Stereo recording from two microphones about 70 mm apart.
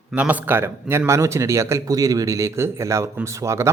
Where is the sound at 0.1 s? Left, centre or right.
Right.